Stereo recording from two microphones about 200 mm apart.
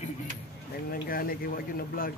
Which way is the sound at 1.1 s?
45° left (ahead or behind).